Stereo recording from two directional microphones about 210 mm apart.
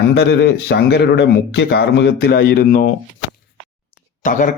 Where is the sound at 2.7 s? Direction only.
35° left (ahead or behind).